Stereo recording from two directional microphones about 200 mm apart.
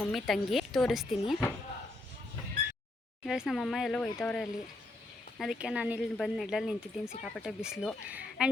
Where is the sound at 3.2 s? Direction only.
Centre (ahead or behind).